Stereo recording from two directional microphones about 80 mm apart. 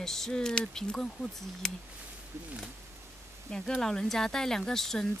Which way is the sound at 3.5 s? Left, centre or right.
Centre.